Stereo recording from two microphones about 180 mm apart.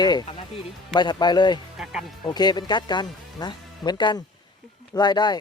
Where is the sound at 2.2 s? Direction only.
25° left (ahead or behind).